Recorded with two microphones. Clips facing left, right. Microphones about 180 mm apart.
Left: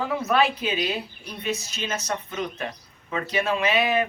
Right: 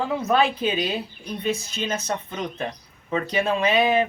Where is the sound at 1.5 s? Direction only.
55° right (ahead or behind).